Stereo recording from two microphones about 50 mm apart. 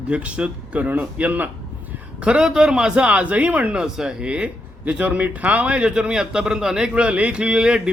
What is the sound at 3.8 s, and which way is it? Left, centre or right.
A man's voice, centre.